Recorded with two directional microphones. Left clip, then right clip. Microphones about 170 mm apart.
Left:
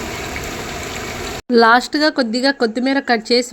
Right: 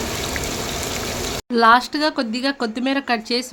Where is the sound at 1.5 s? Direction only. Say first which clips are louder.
Left 3 dB; 30° left (ahead or behind).